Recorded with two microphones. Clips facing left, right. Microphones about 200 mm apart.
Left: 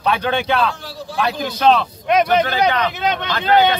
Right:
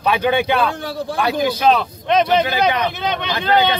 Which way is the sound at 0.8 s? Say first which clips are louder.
Right 2 dB; 55° right (ahead or behind).